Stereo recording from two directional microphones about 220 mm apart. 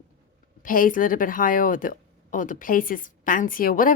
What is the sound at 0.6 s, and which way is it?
Speech, 40° left (ahead or behind).